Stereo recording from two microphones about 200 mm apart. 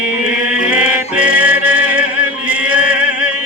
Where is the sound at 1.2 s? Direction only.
90° right.